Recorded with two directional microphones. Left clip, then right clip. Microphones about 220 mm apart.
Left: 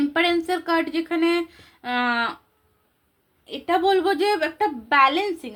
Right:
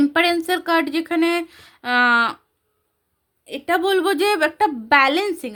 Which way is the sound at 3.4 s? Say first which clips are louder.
Right 1 dB; 40° right (ahead or behind).